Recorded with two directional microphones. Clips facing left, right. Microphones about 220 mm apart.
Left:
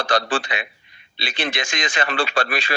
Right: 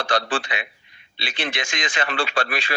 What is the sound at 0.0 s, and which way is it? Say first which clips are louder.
Speech: left 2 dB; 40° left (ahead or behind).